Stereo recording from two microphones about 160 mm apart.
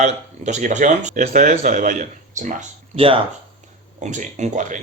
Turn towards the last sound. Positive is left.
turn(degrees=-50)  # may be behind; listen again after turning